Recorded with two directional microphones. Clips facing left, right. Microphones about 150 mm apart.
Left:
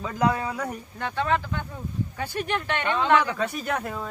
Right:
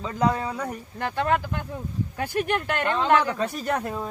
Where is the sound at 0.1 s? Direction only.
25° right (ahead or behind).